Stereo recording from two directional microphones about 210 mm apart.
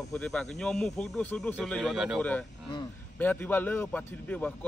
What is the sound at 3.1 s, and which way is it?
A man's voice, 10° left (ahead or behind).